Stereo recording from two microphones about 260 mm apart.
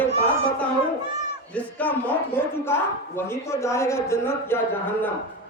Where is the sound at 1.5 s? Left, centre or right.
Centre.